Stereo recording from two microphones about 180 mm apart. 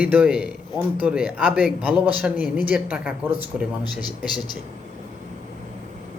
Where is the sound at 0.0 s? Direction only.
5° right (ahead or behind).